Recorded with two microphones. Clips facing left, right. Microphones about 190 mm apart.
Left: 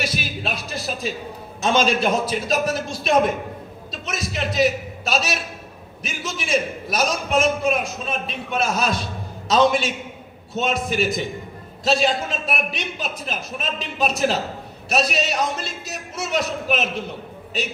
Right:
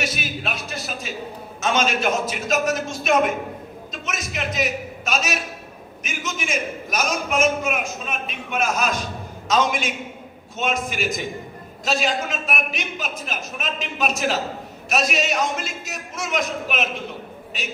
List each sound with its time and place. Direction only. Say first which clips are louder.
0.0 s music: left 1 dB; 35° left (ahead or behind)
1.6 s a man's voice: left 3 dB; 35° left (ahead or behind)
3.9 s a sound: left 2 dB; 35° left (ahead or behind)
6.0 s a man's voice: even; 35° left (ahead or behind)